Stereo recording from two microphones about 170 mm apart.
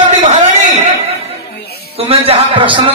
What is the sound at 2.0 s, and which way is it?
Speech, 35° right (ahead or behind).